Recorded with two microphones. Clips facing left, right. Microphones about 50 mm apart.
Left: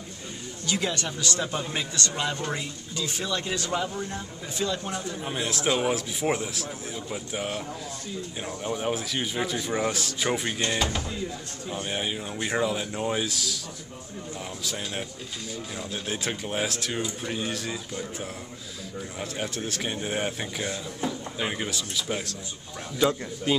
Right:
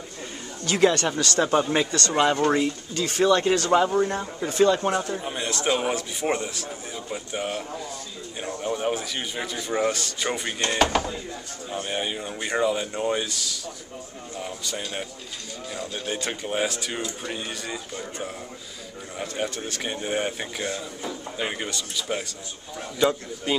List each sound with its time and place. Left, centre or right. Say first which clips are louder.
0.7 s speech: right 8 dB; right
1.4 s speech: right 13 dB; right
1.9 s speech: right 8 dB; right
4.5 s speech: right 10 dB; right
5.2 s a man's voice: right 1 dB; centre